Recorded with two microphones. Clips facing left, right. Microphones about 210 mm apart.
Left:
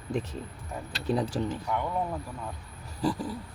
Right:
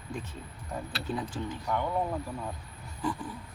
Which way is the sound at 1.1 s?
35° left (ahead or behind).